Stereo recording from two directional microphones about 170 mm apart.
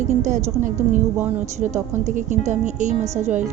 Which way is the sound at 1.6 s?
45° right (ahead or behind).